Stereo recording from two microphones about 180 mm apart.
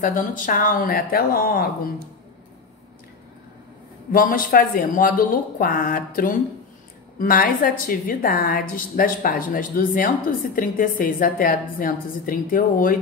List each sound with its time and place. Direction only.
0.0 s a woman's voice: 50° left (ahead or behind)
4.1 s a woman's voice: 50° left (ahead or behind)